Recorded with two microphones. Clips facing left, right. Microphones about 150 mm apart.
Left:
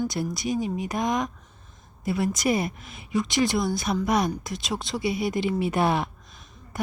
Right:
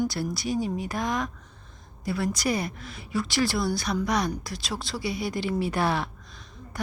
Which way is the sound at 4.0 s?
25° left (ahead or behind).